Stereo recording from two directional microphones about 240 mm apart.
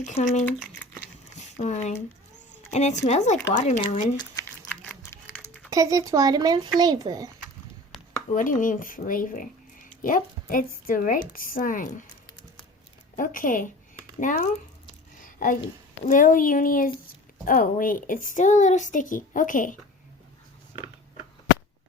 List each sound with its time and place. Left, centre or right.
0.0 s speech: left
1.0 s a sound: left
2.7 s speech: left
4.9 s a sound: centre
5.7 s speech: centre
8.3 s speech: left
13.1 s speech: left
15.2 s a sound: left
16.0 s speech: left